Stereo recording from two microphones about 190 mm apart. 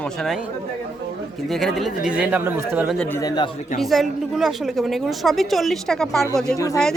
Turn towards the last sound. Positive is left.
turn(degrees=15)  # may be behind; listen again after turning